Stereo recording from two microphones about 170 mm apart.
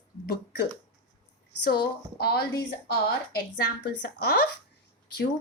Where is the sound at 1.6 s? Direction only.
70° left (ahead or behind).